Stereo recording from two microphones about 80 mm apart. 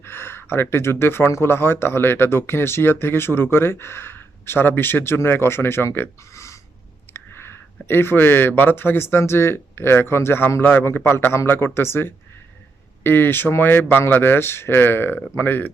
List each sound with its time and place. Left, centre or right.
0.0 s speech: left
6.3 s a sound: left
7.1 s speech: left